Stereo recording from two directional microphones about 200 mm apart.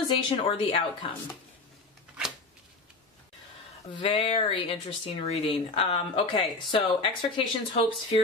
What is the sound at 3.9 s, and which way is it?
Speech, 25° left (ahead or behind).